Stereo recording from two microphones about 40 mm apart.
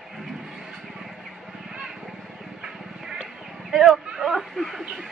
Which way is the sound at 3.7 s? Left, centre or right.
Centre.